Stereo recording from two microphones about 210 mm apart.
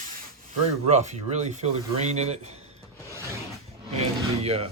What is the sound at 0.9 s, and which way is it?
Speech, 30° right (ahead or behind).